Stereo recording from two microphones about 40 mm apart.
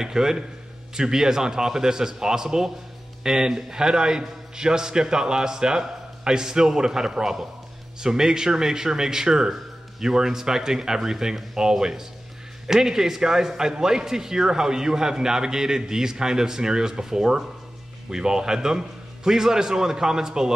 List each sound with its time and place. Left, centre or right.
0.0 s a man's voice: centre